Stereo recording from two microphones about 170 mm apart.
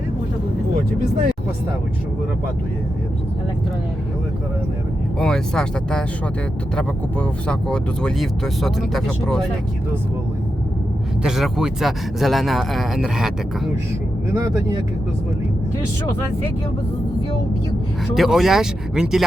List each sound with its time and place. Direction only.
5.2 s speech: 5° left (ahead or behind)
11.2 s speech: 5° right (ahead or behind)
14.3 s speech: 15° right (ahead or behind)
18.1 s speech: centre (ahead or behind)